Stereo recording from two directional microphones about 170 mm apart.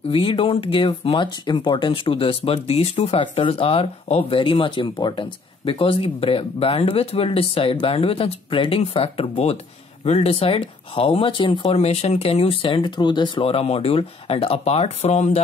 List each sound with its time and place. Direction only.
0.1 s speech: 30° left (ahead or behind)